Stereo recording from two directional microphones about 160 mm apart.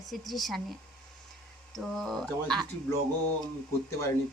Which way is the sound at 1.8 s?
Centre (ahead or behind).